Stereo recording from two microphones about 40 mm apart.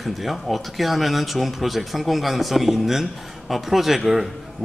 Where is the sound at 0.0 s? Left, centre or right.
Centre.